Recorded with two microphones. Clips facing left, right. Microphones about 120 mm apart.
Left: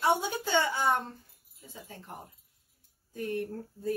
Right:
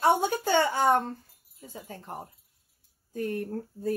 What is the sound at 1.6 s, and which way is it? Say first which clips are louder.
Speech: right 5 dB; 45° right (ahead or behind).